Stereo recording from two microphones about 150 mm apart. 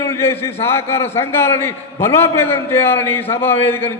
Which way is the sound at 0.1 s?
15° left (ahead or behind).